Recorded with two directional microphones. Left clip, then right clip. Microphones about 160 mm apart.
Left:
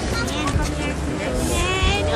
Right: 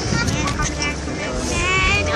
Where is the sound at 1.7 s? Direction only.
40° left (ahead or behind).